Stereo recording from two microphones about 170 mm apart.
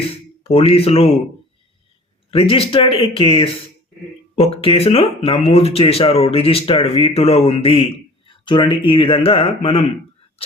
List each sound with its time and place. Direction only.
0.4 s speech: 35° left (ahead or behind)
2.3 s speech: 35° left (ahead or behind)